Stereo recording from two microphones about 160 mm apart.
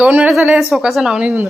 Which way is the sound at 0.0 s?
10° right (ahead or behind).